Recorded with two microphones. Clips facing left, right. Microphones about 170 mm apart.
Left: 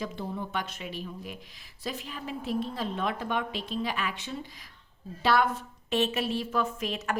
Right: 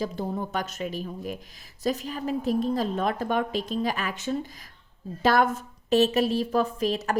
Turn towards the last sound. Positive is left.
turn(degrees=-35)  # may be behind; listen again after turning